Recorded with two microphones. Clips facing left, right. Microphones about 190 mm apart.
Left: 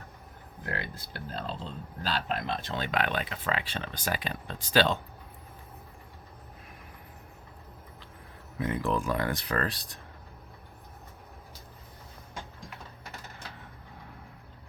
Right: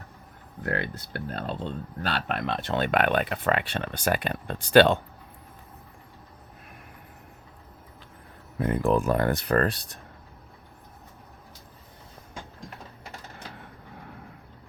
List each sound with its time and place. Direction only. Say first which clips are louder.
0.6 s speech: right 7 dB; 60° right (ahead or behind)
8.5 s speech: right 6 dB; 50° right (ahead or behind)